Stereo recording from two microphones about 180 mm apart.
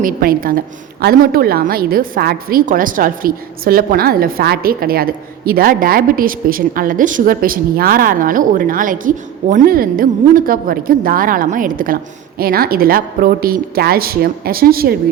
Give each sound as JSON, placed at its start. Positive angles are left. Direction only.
{"t": 0.0, "sound": "a woman's voice", "side_deg": -55}